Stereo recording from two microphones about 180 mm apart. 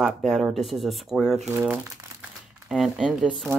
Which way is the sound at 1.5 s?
15° right (ahead or behind).